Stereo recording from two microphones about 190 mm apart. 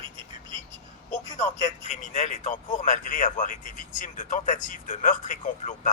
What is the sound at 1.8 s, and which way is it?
Speech, 40° left (ahead or behind).